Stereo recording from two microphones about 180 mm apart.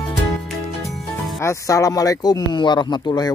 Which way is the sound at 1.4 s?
15° left (ahead or behind).